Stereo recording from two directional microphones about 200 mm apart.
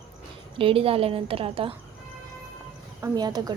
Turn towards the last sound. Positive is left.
turn(degrees=-20)  # may be behind; listen again after turning